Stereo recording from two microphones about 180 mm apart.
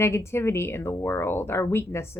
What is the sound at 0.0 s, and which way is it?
A woman's voice, 15° left (ahead or behind).